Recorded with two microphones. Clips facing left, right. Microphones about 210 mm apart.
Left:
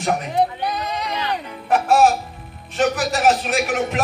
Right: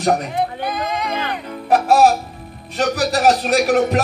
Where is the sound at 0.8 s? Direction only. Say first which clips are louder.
Right 2 dB; 35° left (ahead or behind).